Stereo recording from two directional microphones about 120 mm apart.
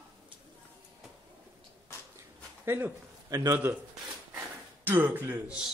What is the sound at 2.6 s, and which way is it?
A man's voice, 20° right (ahead or behind).